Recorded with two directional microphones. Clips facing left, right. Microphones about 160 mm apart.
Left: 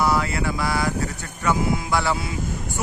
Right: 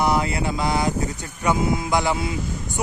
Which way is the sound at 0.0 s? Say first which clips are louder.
Right 1 dB; 20° right (ahead or behind).